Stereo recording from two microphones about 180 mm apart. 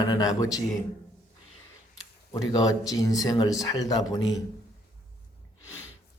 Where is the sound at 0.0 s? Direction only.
20° left (ahead or behind).